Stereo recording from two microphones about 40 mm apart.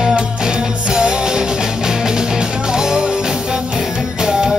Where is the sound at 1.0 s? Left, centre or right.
Centre.